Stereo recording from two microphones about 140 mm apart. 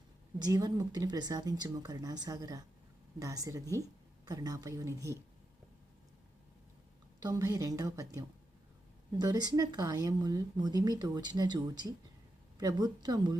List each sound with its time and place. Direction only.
0.3 s a woman's voice: 30° right (ahead or behind)
7.2 s a woman's voice: 25° right (ahead or behind)